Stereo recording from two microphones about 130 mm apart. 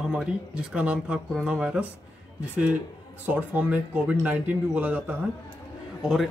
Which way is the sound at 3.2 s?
15° right (ahead or behind).